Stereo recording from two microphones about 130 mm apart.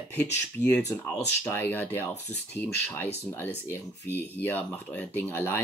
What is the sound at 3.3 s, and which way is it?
Speech, 15° left (ahead or behind).